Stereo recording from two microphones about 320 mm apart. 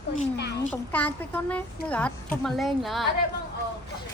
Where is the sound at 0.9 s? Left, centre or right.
Centre.